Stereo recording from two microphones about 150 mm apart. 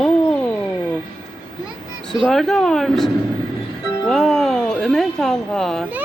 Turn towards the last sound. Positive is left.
turn(degrees=0)  # may be behind; listen again after turning